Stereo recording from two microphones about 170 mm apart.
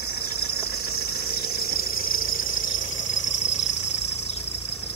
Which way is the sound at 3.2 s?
45° left (ahead or behind).